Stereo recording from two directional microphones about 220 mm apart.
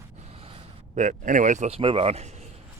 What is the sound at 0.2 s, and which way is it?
Speech, 25° right (ahead or behind).